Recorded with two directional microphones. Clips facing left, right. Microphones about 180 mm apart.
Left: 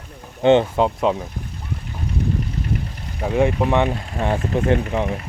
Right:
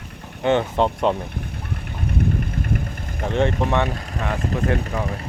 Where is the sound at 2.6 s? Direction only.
50° right (ahead or behind).